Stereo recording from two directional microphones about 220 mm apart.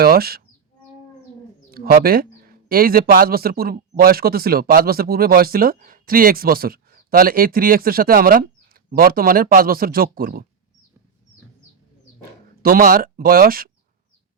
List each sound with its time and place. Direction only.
0.0 s speech: 45° right (ahead or behind)
1.7 s speech: 45° right (ahead or behind)
12.6 s speech: 40° right (ahead or behind)